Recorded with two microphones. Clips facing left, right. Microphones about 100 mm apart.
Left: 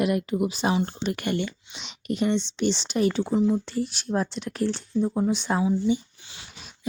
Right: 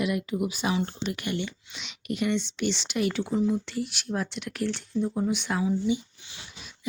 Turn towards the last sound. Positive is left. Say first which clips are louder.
# left 3 dB
turn(degrees=35)  # may be behind; listen again after turning